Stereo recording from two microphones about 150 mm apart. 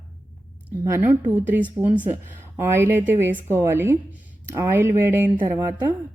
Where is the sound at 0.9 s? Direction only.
15° right (ahead or behind).